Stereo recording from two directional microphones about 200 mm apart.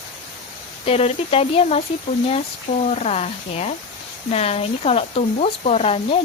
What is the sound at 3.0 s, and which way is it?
Speech, 30° left (ahead or behind).